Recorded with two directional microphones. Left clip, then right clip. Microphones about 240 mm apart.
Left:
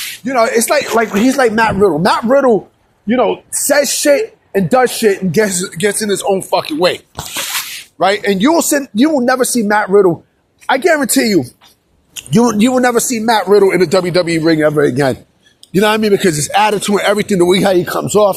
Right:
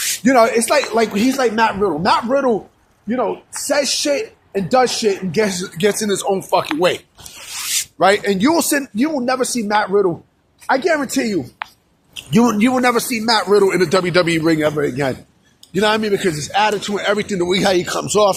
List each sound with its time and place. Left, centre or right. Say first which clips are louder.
0.5 s speech: left 3 dB; centre
0.9 s speech: left 4 dB; centre
1.3 s speech: left 4 dB; left; by 8.9 s centre
9.0 s speech: left 9 dB; left
12.1 s speech: left 3 dB; centre
14.8 s speech: left 7 dB; left
15.7 s speech: left 5 dB; left